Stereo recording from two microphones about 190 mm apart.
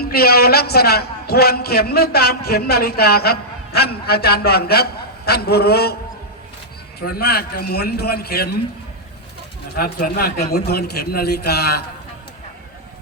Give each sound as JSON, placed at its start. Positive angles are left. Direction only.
{"t": 0.0, "sound": "a man's voice", "side_deg": 55}
{"t": 7.0, "sound": "a man's voice", "side_deg": 55}
{"t": 9.7, "sound": "a man's voice", "side_deg": 55}